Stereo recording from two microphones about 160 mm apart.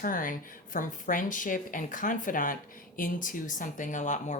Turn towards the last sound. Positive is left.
turn(degrees=50)  # may be behind; listen again after turning